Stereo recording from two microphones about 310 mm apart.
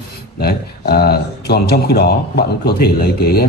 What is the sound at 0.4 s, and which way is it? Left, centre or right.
Speech, left.